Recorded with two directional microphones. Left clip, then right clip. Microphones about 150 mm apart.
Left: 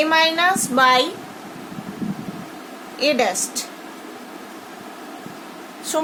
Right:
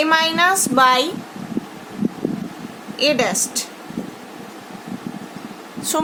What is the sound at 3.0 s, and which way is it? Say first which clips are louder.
Speech: right 1 dB; 35° right (ahead or behind).